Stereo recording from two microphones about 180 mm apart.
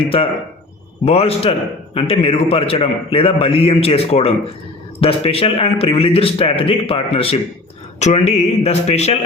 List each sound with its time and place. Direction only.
0.0 s a man's voice: 30° left (ahead or behind)